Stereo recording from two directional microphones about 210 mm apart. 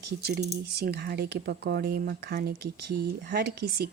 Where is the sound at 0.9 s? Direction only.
50° right (ahead or behind).